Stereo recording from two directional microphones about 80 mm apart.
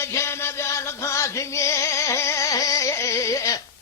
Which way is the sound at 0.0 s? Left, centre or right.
Left.